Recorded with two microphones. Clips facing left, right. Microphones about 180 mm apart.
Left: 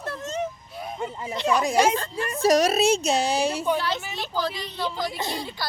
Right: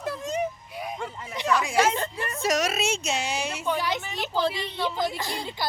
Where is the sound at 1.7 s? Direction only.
15° left (ahead or behind).